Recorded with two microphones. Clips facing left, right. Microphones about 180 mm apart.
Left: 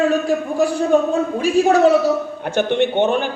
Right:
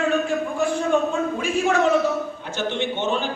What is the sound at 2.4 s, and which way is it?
Speech, 60° left (ahead or behind).